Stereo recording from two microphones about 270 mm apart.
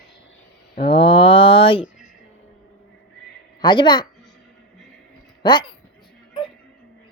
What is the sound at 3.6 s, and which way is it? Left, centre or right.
Mantra, centre.